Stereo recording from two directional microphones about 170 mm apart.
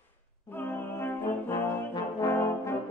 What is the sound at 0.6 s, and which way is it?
Music, 10° left (ahead or behind).